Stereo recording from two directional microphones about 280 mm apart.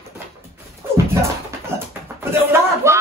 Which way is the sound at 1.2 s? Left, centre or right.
Centre.